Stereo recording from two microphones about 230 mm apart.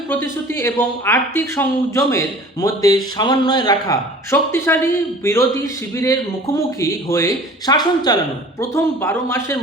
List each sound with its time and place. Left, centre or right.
0.1 s speech: centre